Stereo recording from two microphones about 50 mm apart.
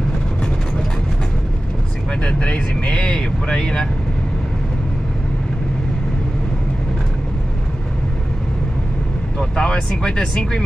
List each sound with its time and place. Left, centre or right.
2.2 s speech: centre
9.4 s speech: centre